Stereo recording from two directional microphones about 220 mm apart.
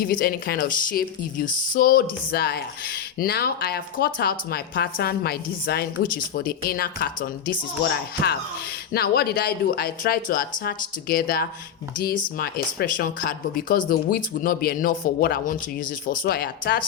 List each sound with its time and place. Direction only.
0.0 s speech: 45° left (ahead or behind)